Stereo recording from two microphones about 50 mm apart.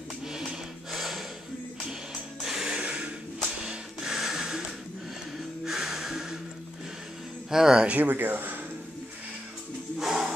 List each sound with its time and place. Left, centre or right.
0.3 s a sound: centre
2.4 s music: centre
2.8 s a sound: right
3.6 s music: centre
7.5 s speech: centre
8.0 s speech: right
9.9 s music: centre